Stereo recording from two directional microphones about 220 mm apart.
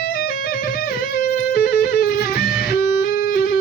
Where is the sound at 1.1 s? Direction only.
45° left (ahead or behind).